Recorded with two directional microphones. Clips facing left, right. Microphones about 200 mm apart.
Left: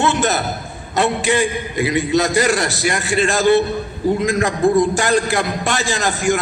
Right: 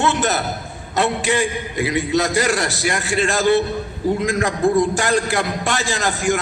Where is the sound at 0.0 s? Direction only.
20° left (ahead or behind).